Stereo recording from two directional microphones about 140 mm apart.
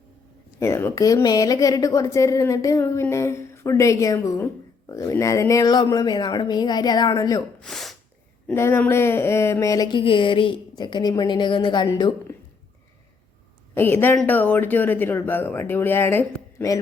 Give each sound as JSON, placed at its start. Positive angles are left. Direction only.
{"t": 0.6, "sound": "a woman's voice", "side_deg": 20}
{"t": 7.6, "sound": "sneeze", "side_deg": 0}
{"t": 8.5, "sound": "a woman's voice", "side_deg": 15}
{"t": 10.0, "sound": "a woman's voice", "side_deg": 40}
{"t": 13.7, "sound": "speech", "side_deg": 15}